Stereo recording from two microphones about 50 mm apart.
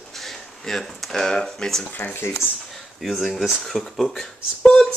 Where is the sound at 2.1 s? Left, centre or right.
Left.